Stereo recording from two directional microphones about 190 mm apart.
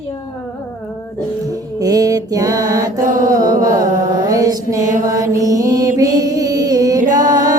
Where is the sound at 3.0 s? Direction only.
45° right (ahead or behind).